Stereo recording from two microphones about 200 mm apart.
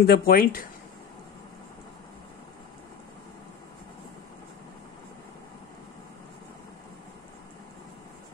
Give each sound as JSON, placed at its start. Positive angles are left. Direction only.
{"t": 0.0, "sound": "speech", "side_deg": 50}